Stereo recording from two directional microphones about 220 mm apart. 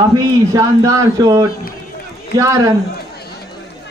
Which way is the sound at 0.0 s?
15° right (ahead or behind).